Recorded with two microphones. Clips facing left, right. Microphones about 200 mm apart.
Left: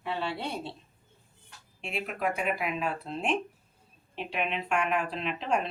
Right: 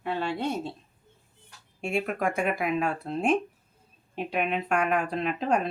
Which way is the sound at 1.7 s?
45° right (ahead or behind).